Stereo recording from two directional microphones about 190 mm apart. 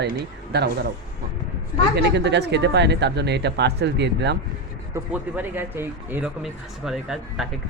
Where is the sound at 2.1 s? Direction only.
65° right (ahead or behind).